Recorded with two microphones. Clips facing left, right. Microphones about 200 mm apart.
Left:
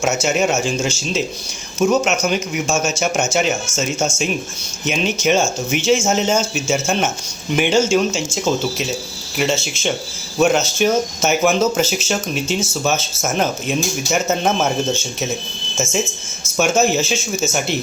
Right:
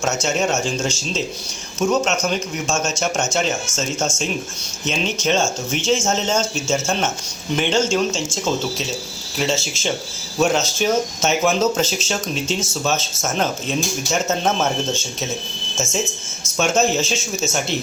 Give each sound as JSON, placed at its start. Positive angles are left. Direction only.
{"t": 0.0, "sound": "speech", "side_deg": 5}
{"t": 16.6, "sound": "speech", "side_deg": 5}